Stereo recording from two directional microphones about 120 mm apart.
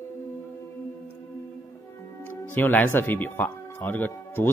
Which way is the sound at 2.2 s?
15° left (ahead or behind).